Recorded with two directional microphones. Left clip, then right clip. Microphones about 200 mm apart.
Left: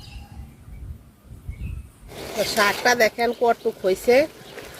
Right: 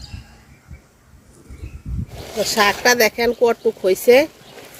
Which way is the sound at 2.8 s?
50° right (ahead or behind).